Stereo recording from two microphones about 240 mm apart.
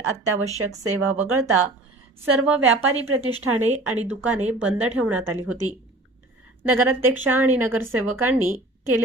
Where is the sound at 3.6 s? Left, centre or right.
Right.